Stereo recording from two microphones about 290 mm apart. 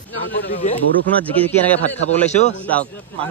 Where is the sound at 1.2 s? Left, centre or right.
Centre.